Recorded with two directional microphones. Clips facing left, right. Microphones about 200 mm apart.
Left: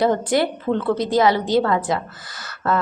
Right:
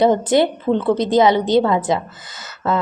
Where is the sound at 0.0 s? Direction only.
20° right (ahead or behind).